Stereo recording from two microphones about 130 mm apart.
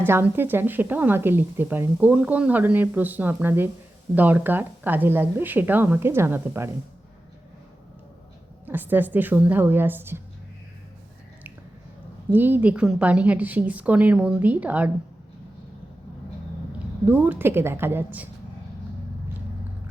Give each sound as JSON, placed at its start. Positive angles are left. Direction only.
{"t": 0.0, "sound": "speech", "side_deg": -15}
{"t": 8.6, "sound": "speech", "side_deg": -15}
{"t": 12.3, "sound": "speech", "side_deg": -15}
{"t": 17.1, "sound": "speech", "side_deg": -15}